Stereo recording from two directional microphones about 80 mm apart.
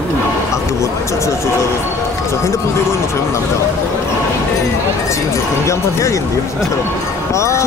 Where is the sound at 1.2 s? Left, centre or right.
Left.